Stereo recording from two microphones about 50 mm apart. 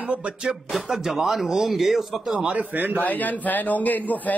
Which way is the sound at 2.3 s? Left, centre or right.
Right.